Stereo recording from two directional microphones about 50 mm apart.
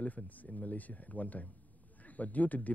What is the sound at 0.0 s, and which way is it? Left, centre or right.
A man's voice, left.